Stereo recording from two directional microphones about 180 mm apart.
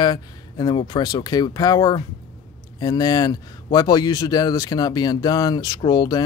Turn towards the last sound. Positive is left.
turn(degrees=20)  # may be behind; listen again after turning